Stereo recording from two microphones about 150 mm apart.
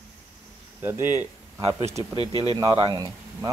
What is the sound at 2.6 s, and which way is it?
Speech, 35° right (ahead or behind).